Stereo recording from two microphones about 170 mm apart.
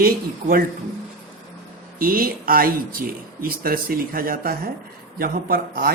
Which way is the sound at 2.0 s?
55° right (ahead or behind).